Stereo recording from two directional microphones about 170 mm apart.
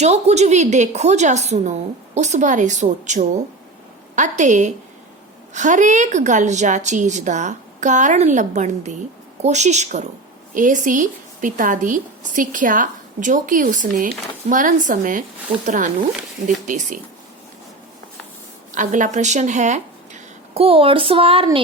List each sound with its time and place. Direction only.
0.0 s a woman's voice: 40° right (ahead or behind)
18.7 s speech: 50° right (ahead or behind); by 21.6 s 30° right (ahead or behind)